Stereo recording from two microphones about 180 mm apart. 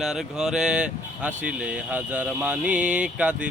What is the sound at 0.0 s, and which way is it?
Speech, centre (ahead or behind).